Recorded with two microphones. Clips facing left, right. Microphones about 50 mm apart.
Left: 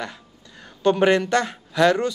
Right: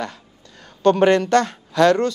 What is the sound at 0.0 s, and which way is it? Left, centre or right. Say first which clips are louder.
A woman's voice: right 3 dB; centre.